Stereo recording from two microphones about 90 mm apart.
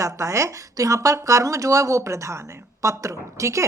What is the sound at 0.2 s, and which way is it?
Speech, 35° right (ahead or behind).